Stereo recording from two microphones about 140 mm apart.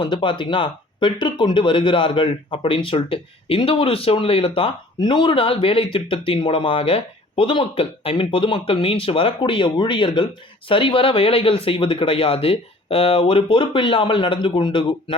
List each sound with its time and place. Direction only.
0.0 s speech: 35° left (ahead or behind)